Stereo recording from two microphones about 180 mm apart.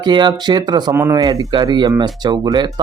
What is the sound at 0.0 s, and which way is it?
Speech, 25° right (ahead or behind).